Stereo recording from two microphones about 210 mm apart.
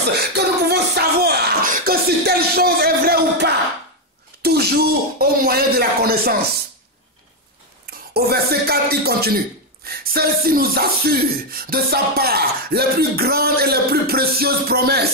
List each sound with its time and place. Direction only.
0.2 s a sound: 50° right (ahead or behind)
4.4 s speech: 50° right (ahead or behind)
8.1 s speech: 45° right (ahead or behind)